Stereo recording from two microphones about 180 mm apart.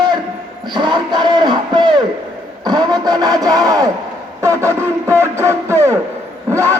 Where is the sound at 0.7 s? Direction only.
25° right (ahead or behind).